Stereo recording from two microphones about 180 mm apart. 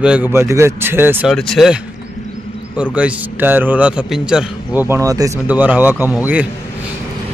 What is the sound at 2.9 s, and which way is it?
A man's voice, 10° right (ahead or behind).